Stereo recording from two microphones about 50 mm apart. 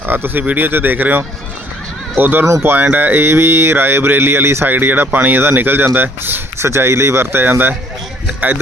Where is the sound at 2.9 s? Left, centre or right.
Right.